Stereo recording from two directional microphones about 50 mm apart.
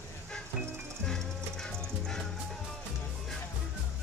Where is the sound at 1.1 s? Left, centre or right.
Centre.